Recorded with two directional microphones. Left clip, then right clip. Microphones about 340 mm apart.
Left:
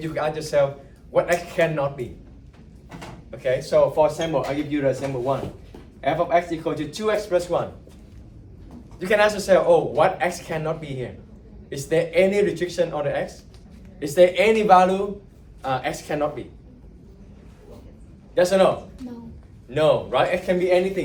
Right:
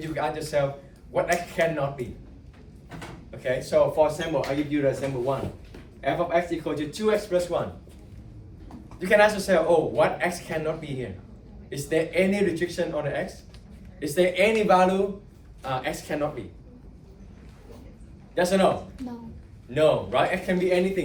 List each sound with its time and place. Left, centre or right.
0.0 s speech: centre
3.3 s speech: centre
9.0 s speech: centre
18.3 s speech: centre
19.7 s speech: centre